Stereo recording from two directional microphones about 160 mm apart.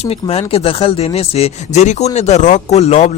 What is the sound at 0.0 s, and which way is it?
Speech, 40° left (ahead or behind).